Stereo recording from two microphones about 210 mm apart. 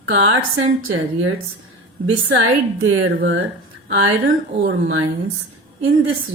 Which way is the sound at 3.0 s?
65° right (ahead or behind).